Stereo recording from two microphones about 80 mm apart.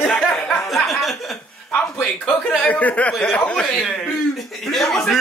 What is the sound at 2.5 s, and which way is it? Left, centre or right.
A man's voice, centre.